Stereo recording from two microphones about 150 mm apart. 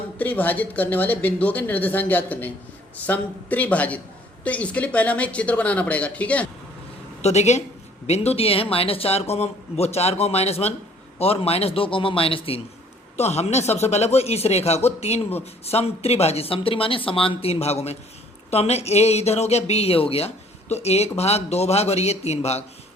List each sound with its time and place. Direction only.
0.2 s speech: 10° left (ahead or behind)
7.2 s a man's voice: 45° left (ahead or behind)